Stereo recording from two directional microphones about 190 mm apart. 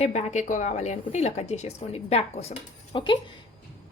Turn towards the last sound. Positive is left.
turn(degrees=25)  # may be behind; listen again after turning